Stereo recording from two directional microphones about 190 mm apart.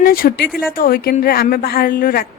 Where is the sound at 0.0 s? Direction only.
50° left (ahead or behind).